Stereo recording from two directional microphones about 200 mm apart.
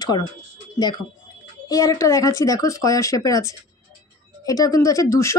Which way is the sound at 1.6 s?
15° left (ahead or behind).